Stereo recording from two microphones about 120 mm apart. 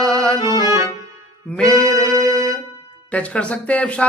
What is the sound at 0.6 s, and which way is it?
Music, 25° right (ahead or behind).